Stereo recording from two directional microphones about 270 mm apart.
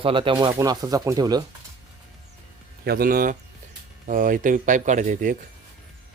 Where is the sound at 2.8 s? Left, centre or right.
Right.